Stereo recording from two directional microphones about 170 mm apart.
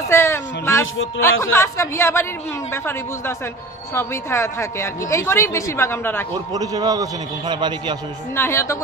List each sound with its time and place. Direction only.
0.1 s a sound: 15° left (ahead or behind)
1.2 s a woman's voice: 15° left (ahead or behind)
6.3 s a man's voice: 20° right (ahead or behind)
8.4 s a woman's voice: 15° left (ahead or behind)